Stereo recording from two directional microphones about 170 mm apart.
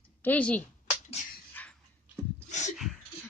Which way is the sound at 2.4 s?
45° left (ahead or behind).